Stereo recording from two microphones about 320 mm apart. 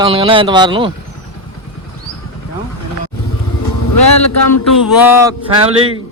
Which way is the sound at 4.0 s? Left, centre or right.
Left.